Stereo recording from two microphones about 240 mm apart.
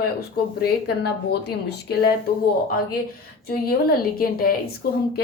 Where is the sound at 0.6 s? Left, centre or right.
Left.